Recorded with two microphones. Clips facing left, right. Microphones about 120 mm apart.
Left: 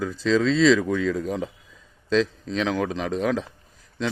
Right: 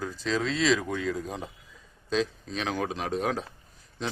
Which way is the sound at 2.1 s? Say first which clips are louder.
Left 6 dB; 90° left.